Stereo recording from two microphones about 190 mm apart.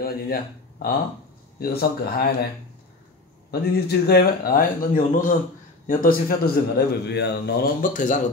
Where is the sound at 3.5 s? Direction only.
55° left (ahead or behind).